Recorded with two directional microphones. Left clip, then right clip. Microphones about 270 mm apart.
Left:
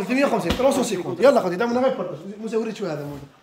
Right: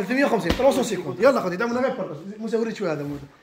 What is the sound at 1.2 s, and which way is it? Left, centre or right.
Speech, centre.